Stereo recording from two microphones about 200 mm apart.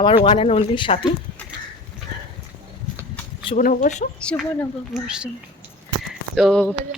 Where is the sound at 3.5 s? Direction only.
40° left (ahead or behind).